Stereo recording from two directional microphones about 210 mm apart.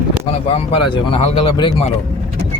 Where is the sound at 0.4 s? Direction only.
30° left (ahead or behind).